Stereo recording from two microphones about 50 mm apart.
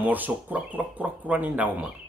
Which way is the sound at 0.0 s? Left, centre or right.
Right.